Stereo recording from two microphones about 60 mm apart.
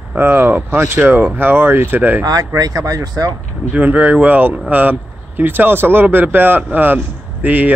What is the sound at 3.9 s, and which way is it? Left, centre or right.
Speech, right.